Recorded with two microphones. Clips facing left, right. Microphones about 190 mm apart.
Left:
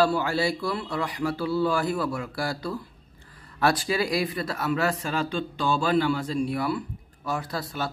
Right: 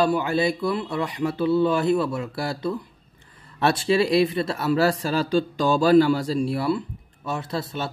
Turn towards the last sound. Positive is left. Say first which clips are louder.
# right 3 dB
turn(degrees=-25)  # may be behind; listen again after turning